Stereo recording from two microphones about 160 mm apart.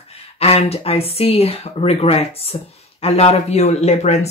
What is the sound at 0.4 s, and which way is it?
Speech, 40° left (ahead or behind).